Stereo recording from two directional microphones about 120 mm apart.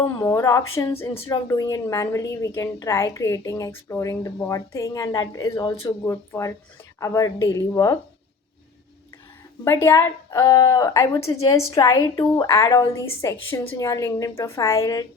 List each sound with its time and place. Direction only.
0.2 s a woman's voice: 30° left (ahead or behind)
1.3 s a woman's voice: 30° left (ahead or behind)
9.6 s a woman's voice: 25° left (ahead or behind)